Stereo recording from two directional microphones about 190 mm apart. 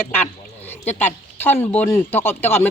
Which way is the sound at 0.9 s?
10° left (ahead or behind).